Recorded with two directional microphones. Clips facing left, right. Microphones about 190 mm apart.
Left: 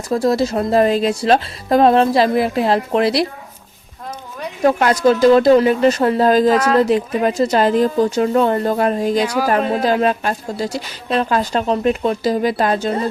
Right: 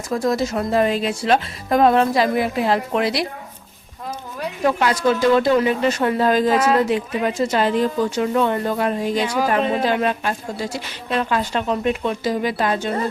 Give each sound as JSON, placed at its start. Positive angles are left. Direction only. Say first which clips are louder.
{"t": 0.1, "sound": "speech", "louder": "left 4 dB", "side_deg": 35}
{"t": 4.6, "sound": "speech", "louder": "left 5 dB", "side_deg": 45}
{"t": 6.5, "sound": "speech", "louder": "left 2 dB", "side_deg": -5}
{"t": 6.8, "sound": "speech", "louder": "left 4 dB", "side_deg": 40}
{"t": 9.4, "sound": "speech", "louder": "left 2 dB", "side_deg": 5}
{"t": 9.8, "sound": "speech", "louder": "left 4 dB", "side_deg": 40}